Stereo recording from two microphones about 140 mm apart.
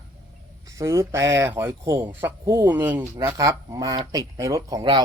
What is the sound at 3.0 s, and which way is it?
Speech, 30° right (ahead or behind).